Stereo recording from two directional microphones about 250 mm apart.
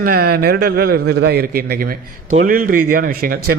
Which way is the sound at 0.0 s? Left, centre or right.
Right.